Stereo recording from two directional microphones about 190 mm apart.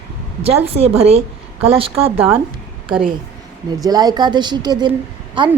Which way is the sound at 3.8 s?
20° right (ahead or behind).